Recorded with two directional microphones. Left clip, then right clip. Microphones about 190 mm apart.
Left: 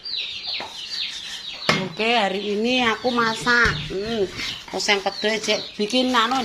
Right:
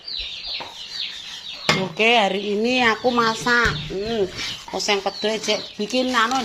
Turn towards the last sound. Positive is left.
turn(degrees=0)  # may be behind; listen again after turning